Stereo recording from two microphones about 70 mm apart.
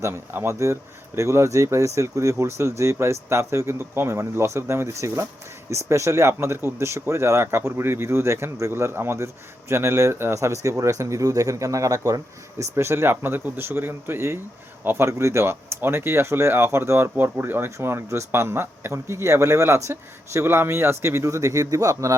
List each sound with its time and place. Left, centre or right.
0.0 s speech: right